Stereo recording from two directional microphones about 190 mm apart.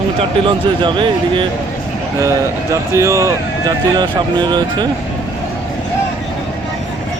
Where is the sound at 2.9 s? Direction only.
15° right (ahead or behind).